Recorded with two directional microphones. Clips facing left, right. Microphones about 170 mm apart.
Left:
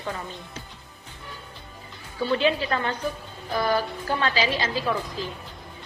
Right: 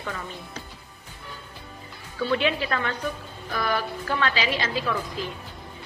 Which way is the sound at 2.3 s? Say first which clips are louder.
Left 2 dB; 30° left (ahead or behind).